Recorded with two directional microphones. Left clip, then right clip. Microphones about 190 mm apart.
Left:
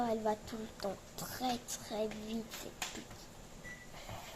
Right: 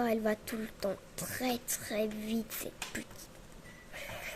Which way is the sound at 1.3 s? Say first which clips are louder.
Right 3 dB; 40° right (ahead or behind).